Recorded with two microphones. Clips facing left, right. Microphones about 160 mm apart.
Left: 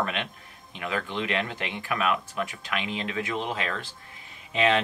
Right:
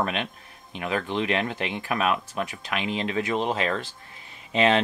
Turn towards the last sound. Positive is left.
turn(degrees=-30)  # may be behind; listen again after turning